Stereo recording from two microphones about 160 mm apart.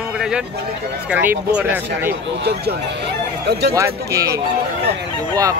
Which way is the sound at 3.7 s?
20° right (ahead or behind).